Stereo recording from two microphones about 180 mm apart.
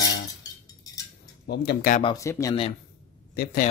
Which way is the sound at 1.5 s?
65° left (ahead or behind).